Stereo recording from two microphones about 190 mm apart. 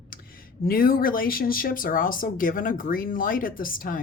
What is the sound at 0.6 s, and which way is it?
Speech, 50° left (ahead or behind).